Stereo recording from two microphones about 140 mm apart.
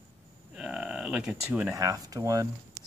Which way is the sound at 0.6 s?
5° right (ahead or behind).